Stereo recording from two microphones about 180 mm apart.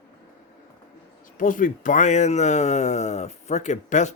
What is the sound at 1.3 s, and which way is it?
A man's voice, 50° left (ahead or behind).